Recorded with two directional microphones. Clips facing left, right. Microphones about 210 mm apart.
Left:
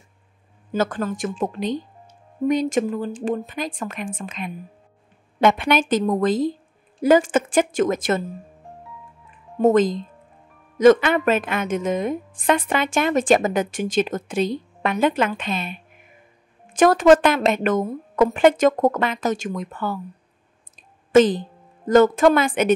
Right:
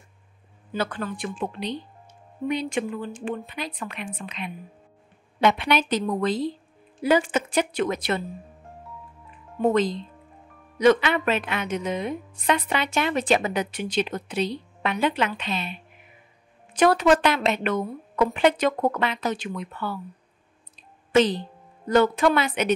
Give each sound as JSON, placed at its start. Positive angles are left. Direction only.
{"t": 0.7, "sound": "a woman's voice", "side_deg": 45}
{"t": 9.6, "sound": "a woman's voice", "side_deg": 45}
{"t": 21.1, "sound": "speech", "side_deg": 50}